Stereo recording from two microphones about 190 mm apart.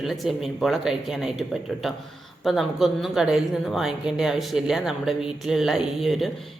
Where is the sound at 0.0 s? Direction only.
Centre (ahead or behind).